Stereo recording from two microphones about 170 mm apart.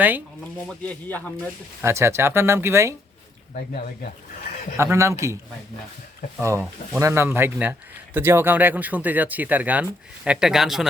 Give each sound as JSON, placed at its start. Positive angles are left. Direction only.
{"t": 0.7, "sound": "speech", "side_deg": 10}
{"t": 1.8, "sound": "speech", "side_deg": -15}
{"t": 3.5, "sound": "speech", "side_deg": 55}
{"t": 4.8, "sound": "speech", "side_deg": -15}
{"t": 6.4, "sound": "speech", "side_deg": -15}